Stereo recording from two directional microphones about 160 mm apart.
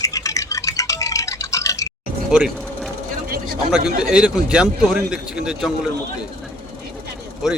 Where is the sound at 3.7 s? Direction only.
5° right (ahead or behind).